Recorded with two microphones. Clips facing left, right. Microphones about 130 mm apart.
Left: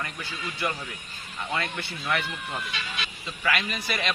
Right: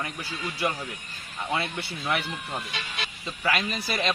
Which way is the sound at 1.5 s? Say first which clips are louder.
Right 2 dB; 15° right (ahead or behind).